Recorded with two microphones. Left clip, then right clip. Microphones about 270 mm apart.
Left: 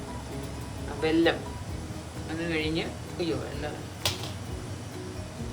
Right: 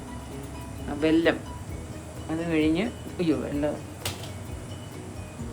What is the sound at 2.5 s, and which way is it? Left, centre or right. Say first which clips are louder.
Speech: right 6 dB; right.